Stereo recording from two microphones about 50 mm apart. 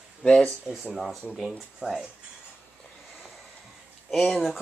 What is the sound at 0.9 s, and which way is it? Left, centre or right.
Speech, centre.